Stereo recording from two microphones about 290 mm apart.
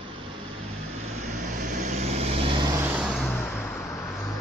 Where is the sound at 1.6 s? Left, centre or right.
Right.